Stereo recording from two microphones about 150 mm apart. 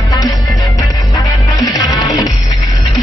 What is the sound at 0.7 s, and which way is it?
Music, 20° left (ahead or behind).